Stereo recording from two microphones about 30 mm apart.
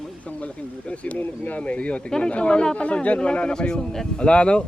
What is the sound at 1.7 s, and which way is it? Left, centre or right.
Speech, left.